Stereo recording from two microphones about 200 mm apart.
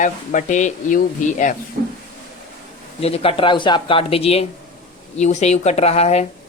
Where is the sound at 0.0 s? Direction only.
40° left (ahead or behind).